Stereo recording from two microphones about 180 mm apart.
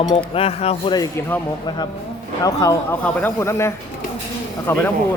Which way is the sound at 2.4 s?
20° left (ahead or behind).